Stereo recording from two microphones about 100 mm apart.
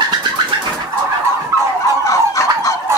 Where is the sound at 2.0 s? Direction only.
30° left (ahead or behind).